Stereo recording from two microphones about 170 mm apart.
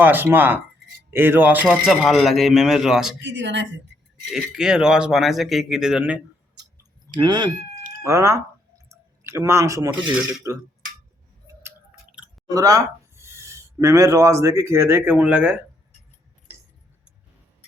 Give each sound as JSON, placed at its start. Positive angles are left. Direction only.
{"t": 0.0, "sound": "a man's voice", "side_deg": -10}
{"t": 3.2, "sound": "speech", "side_deg": -90}
{"t": 4.3, "sound": "a man's voice", "side_deg": -5}
{"t": 7.2, "sound": "speech", "side_deg": -25}
{"t": 12.5, "sound": "speech", "side_deg": -20}